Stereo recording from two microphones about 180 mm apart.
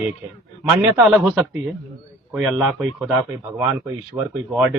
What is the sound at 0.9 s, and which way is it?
A man's voice, 5° right (ahead or behind).